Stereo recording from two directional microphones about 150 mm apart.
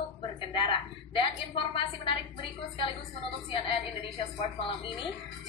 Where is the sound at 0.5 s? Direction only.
35° left (ahead or behind).